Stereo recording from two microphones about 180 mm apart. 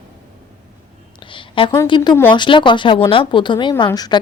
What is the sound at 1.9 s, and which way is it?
Speech, 25° left (ahead or behind).